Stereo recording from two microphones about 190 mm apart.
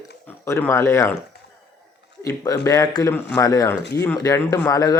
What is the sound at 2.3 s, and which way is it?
Speech, 15° left (ahead or behind).